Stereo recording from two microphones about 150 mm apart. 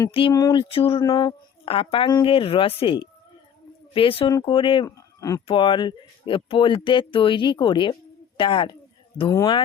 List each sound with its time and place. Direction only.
0.1 s speech: 35° left (ahead or behind)
0.3 s speech: 25° left (ahead or behind)
0.6 s speech: 40° left (ahead or behind)
4.9 s speech: 20° left (ahead or behind)
5.5 s speech: 35° left (ahead or behind)
9.3 s speech: 20° left (ahead or behind)